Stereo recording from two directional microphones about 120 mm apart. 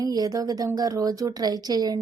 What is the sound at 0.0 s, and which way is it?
Speech, 30° right (ahead or behind).